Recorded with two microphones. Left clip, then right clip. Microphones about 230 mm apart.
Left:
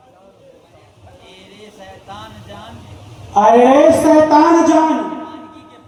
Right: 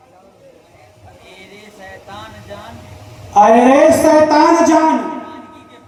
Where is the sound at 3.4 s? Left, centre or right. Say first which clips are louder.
Right 1 dB; right.